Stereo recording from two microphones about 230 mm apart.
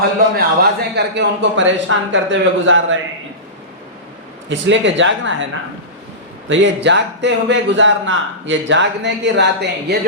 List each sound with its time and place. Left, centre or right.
0.3 s a man's voice: right
4.4 s a man's voice: right
6.5 s a man's voice: right